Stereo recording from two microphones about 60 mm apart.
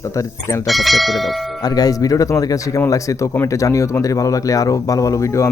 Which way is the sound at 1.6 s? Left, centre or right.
Left.